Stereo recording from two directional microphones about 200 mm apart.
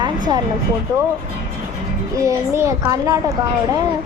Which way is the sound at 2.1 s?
15° right (ahead or behind).